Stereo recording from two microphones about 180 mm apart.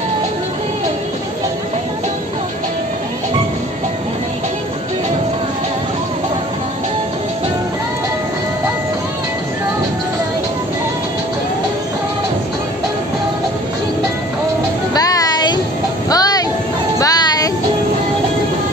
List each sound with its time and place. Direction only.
15.0 s music: 20° left (ahead or behind)
16.1 s vehicle: 20° left (ahead or behind)
17.0 s music: 20° left (ahead or behind)